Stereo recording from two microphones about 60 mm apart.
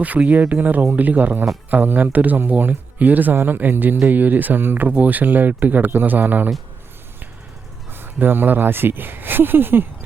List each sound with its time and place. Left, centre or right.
0.0 s speech: right
7.9 s speech: right